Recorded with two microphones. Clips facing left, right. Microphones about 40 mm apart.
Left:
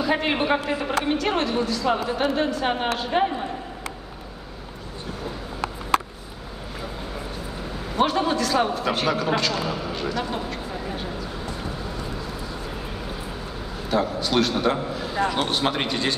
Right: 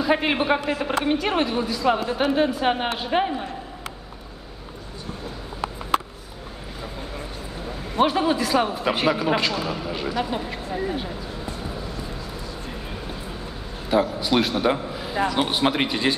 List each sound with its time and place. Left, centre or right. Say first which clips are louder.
0.0 s a woman's voice: right 2 dB; centre
0.4 s a man's voice: right 1 dB; centre
1.0 s a woman's voice: right 1 dB; centre
7.9 s a woman's voice: right 1 dB; centre
10.9 s a sound: right 1 dB; centre
13.8 s a woman's voice: right 2 dB; centre